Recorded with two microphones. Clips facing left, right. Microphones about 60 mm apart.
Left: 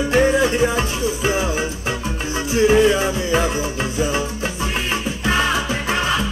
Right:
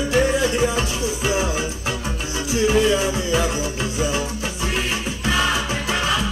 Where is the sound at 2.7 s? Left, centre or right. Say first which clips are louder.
Left 3 dB; left.